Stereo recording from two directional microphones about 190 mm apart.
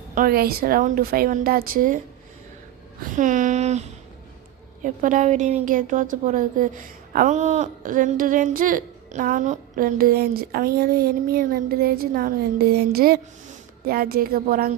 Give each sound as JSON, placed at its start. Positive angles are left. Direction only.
{"t": 0.1, "sound": "speech", "side_deg": -50}
{"t": 3.2, "sound": "speech", "side_deg": -40}